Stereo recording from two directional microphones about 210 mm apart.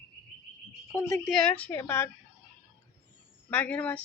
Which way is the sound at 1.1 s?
5° left (ahead or behind).